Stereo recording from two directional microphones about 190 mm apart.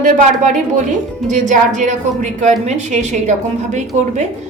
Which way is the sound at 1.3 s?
40° right (ahead or behind).